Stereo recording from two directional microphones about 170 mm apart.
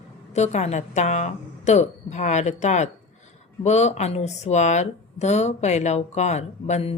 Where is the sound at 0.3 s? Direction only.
45° left (ahead or behind).